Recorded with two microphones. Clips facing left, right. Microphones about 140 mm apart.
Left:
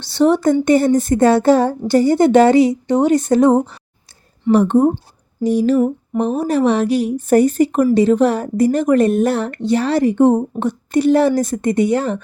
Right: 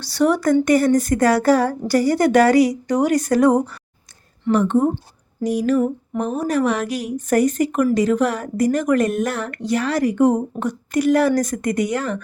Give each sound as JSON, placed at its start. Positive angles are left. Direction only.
{"t": 0.0, "sound": "speech", "side_deg": 25}
{"t": 4.5, "sound": "speech", "side_deg": 35}